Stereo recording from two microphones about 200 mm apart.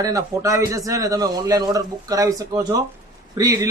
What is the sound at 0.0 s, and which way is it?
A man's voice, 15° right (ahead or behind).